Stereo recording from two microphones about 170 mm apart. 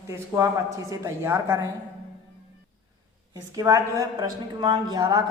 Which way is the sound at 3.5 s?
20° right (ahead or behind).